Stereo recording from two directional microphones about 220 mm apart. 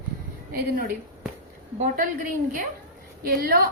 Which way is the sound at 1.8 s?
40° right (ahead or behind).